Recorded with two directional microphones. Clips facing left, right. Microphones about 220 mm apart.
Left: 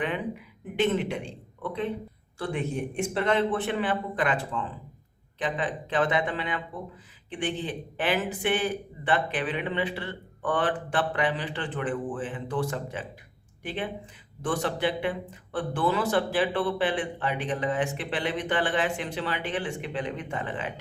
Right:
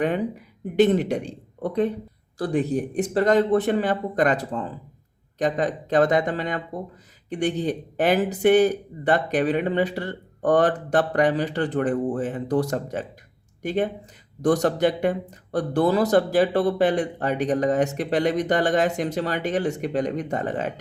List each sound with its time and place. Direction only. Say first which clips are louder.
0.0 s speech: right 6 dB; 40° right (ahead or behind)